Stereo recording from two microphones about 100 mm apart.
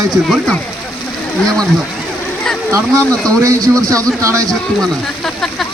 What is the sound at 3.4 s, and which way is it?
Speech, 35° right (ahead or behind).